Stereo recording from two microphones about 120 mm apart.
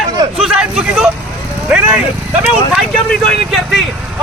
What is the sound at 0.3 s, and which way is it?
Vehicle, 5° right (ahead or behind).